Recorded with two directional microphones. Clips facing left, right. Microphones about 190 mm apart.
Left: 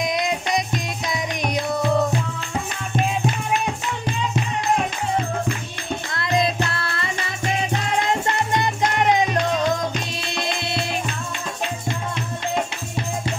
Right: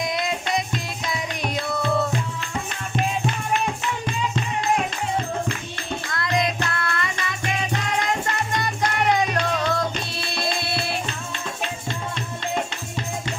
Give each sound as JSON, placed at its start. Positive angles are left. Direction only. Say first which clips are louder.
{"t": 0.0, "sound": "music", "louder": "left 2 dB", "side_deg": 20}
{"t": 6.1, "sound": "music", "louder": "left 2 dB", "side_deg": 30}
{"t": 8.1, "sound": "music", "louder": "left 3 dB", "side_deg": 20}